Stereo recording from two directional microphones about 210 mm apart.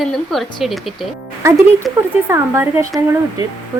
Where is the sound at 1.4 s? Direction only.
15° right (ahead or behind).